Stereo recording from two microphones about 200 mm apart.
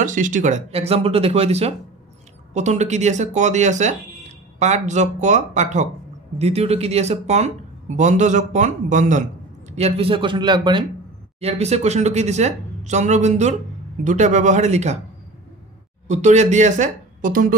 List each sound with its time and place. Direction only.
0.0 s a man's voice: 40° right (ahead or behind)
16.1 s speech: 35° right (ahead or behind)